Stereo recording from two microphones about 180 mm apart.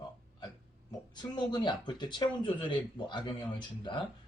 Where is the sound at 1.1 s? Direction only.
25° left (ahead or behind).